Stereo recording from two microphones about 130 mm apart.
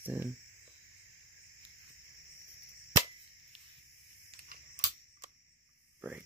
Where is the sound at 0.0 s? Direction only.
15° right (ahead or behind).